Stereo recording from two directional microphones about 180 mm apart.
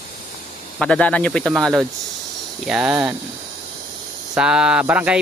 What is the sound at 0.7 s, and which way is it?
Speech, 5° left (ahead or behind).